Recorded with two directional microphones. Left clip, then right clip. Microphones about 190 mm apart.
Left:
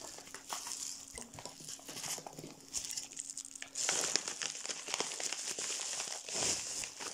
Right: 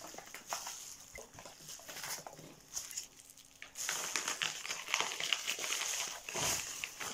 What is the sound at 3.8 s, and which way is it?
Crumpling, 50° left (ahead or behind).